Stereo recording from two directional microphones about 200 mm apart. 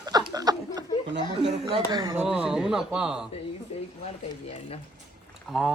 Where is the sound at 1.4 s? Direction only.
25° right (ahead or behind).